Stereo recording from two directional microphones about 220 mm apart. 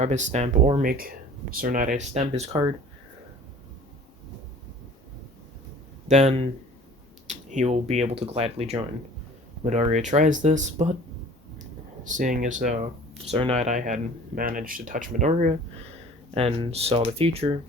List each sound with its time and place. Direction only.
0.0 s speech: 30° right (ahead or behind)
6.1 s speech: 30° right (ahead or behind)
12.0 s speech: 35° right (ahead or behind)